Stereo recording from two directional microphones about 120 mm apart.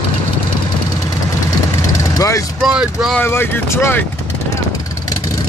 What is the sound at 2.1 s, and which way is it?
Vehicle, 25° left (ahead or behind).